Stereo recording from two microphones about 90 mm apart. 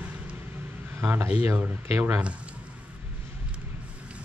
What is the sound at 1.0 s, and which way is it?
Speech, 30° right (ahead or behind).